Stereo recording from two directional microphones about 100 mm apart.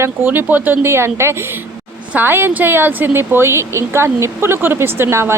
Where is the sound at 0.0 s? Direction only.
20° right (ahead or behind).